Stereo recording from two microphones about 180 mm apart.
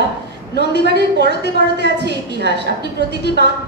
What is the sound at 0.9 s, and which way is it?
A woman's voice, 70° right (ahead or behind).